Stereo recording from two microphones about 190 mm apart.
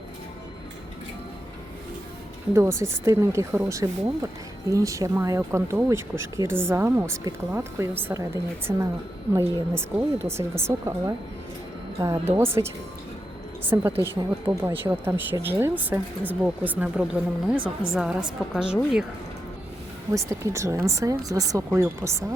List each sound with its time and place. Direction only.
2.5 s speech: 15° right (ahead or behind)
20.1 s speech: 15° right (ahead or behind)